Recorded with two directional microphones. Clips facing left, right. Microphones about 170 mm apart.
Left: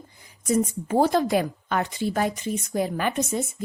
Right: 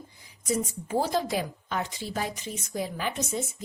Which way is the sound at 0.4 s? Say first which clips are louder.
Left 6 dB; 50° left (ahead or behind).